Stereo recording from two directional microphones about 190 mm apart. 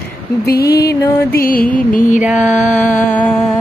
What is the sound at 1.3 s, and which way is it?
Music, 50° left (ahead or behind).